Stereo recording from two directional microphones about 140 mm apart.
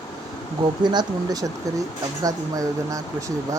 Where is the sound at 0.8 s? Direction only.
30° right (ahead or behind).